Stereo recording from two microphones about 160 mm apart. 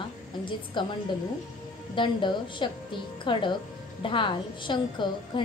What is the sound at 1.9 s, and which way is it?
A woman's voice, 30° left (ahead or behind).